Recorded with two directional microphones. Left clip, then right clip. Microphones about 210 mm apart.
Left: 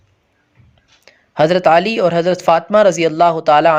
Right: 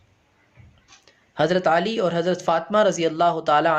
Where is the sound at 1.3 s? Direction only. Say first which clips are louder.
Left 8 dB; 35° left (ahead or behind).